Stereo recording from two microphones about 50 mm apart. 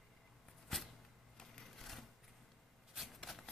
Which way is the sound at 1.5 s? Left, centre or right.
Centre.